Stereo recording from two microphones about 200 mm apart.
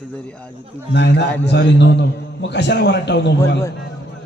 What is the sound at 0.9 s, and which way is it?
A man's voice, 60° left (ahead or behind).